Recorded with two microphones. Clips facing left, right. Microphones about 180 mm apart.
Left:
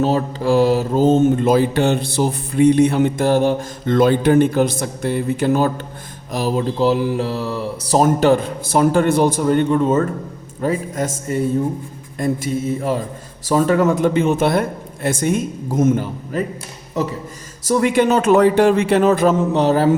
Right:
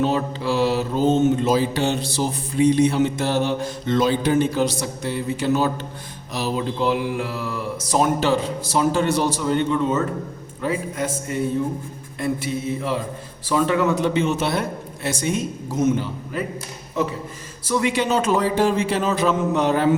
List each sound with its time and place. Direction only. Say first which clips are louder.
0.0 s mantra: left 4 dB; 40° left (ahead or behind)
6.7 s mantra: left 5 dB; 35° left (ahead or behind)
10.6 s a man's voice: left 4 dB; 45° left (ahead or behind)
12.2 s mantra: left 4 dB; 45° left (ahead or behind)
17.7 s a man's voice: left 6 dB; 45° left (ahead or behind)
19.5 s a man's voice: left 4 dB; 35° left (ahead or behind)